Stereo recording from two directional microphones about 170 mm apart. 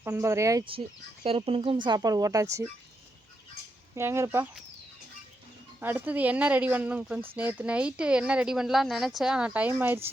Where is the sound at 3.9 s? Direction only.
15° right (ahead or behind).